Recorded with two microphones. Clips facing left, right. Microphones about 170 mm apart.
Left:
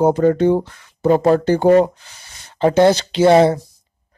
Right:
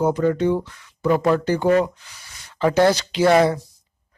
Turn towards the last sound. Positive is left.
turn(degrees=25)  # may be behind; listen again after turning